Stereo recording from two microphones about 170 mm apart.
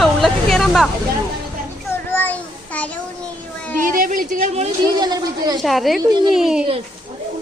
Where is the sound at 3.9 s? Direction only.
55° right (ahead or behind).